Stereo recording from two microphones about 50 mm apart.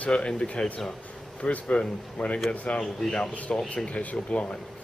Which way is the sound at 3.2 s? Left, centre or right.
Left.